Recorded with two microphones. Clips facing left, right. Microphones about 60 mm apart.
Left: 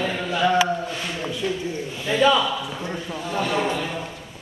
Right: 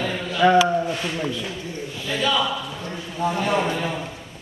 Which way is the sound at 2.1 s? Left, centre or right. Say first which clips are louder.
Left 5 dB; left.